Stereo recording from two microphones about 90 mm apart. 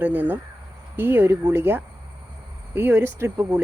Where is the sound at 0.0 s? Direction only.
20° right (ahead or behind).